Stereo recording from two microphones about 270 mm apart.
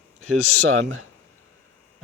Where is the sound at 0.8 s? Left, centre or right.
Right.